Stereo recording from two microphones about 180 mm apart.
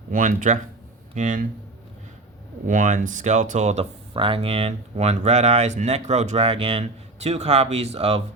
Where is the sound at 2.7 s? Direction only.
45° right (ahead or behind).